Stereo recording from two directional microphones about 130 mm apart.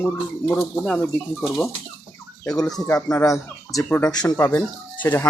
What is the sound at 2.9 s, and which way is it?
Speech, 25° left (ahead or behind).